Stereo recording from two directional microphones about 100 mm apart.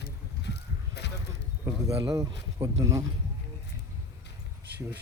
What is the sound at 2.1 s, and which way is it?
Speech, 35° right (ahead or behind).